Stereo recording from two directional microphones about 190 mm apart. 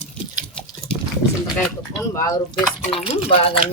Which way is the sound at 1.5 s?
10° left (ahead or behind).